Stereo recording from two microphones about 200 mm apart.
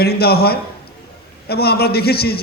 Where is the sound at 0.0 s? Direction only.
50° left (ahead or behind).